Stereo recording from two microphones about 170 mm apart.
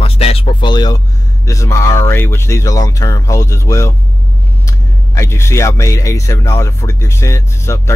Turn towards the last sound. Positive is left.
turn(degrees=15)  # may be behind; listen again after turning